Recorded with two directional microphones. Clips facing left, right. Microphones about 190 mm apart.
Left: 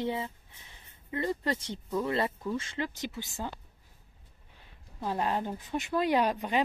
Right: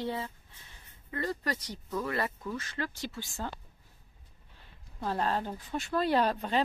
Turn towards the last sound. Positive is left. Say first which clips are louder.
# left 1 dB
turn(degrees=15)  # may be behind; listen again after turning